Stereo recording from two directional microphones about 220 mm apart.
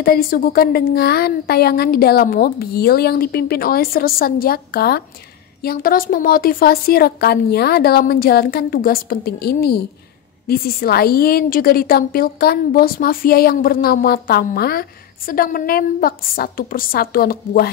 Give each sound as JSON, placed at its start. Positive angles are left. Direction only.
{"t": 0.0, "sound": "a woman's voice", "side_deg": 45}